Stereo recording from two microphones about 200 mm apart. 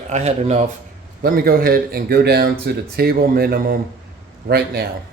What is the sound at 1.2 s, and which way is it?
Speech, 45° right (ahead or behind).